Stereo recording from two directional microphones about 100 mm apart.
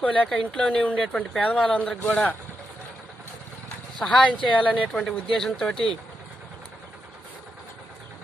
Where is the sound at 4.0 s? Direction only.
10° left (ahead or behind).